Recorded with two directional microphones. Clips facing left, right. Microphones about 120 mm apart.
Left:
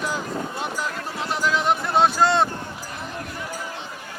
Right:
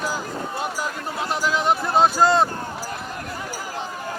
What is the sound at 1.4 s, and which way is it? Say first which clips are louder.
Speech: even; centre (ahead or behind).